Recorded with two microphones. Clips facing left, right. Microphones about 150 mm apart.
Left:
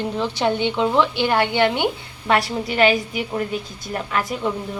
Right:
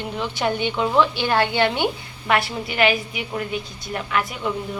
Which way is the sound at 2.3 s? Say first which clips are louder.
Left 2 dB; 35° left (ahead or behind).